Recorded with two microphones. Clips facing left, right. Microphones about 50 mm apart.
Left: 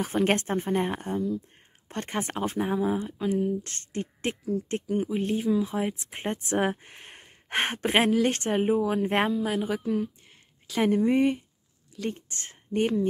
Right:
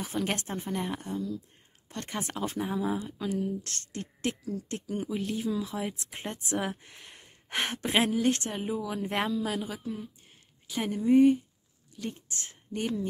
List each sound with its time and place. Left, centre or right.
0.0 s speech: left
3.1 s speech: centre; by 9.4 s left
9.7 s speech: left